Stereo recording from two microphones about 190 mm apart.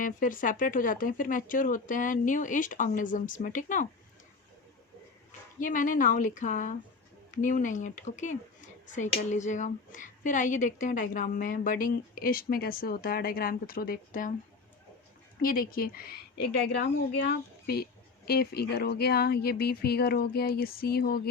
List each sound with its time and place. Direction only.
0.0 s a woman's voice: 45° left (ahead or behind)
5.5 s a woman's voice: 45° left (ahead or behind)
15.4 s a woman's voice: 50° left (ahead or behind)